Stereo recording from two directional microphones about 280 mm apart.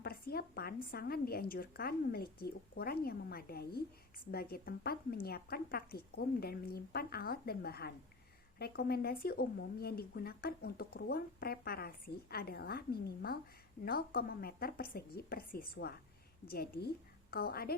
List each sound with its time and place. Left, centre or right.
0.0 s speech: left